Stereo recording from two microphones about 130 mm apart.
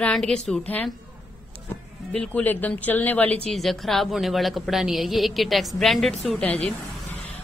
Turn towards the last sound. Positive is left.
turn(degrees=0)  # may be behind; listen again after turning